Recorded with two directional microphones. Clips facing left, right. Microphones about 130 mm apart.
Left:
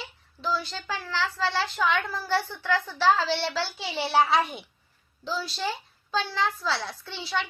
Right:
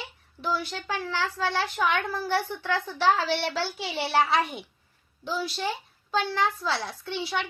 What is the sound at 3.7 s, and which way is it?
Speech, 5° right (ahead or behind).